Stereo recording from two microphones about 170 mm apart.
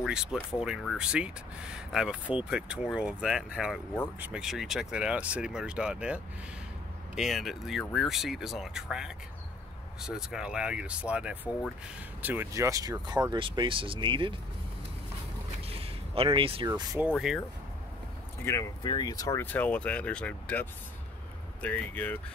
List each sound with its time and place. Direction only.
0.0 s speech: 5° right (ahead or behind); by 14.3 s 30° right (ahead or behind)
15.8 s speech: 35° right (ahead or behind)
18.4 s speech: 15° left (ahead or behind)